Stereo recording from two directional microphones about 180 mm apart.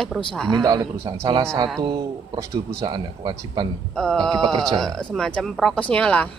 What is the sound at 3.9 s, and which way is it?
Speech, 5° left (ahead or behind).